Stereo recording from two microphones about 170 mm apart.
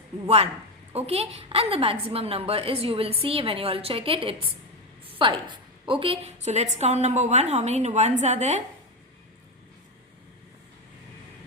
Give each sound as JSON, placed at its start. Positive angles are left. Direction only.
{"t": 0.3, "sound": "a woman's voice", "side_deg": -35}